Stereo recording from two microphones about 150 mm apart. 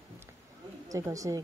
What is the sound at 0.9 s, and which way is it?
Speech, 20° right (ahead or behind).